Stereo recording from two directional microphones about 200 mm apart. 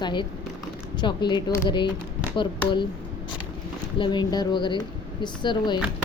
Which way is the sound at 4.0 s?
20° left (ahead or behind).